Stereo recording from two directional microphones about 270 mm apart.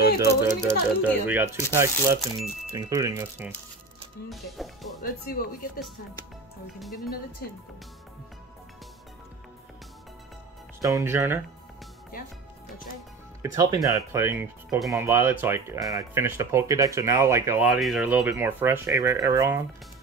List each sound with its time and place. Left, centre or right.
0.6 s speech: centre
4.6 s speech: centre
5.0 s speech: left
10.8 s speech: centre
13.4 s speech: centre